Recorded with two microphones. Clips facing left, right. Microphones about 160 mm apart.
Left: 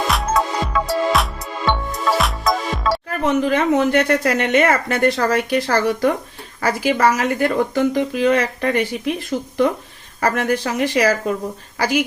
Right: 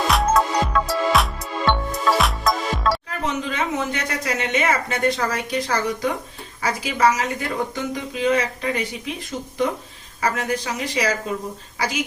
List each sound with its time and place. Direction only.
0.1 s music: centre (ahead or behind)
3.1 s speech: 60° left (ahead or behind)
10.2 s speech: 55° left (ahead or behind)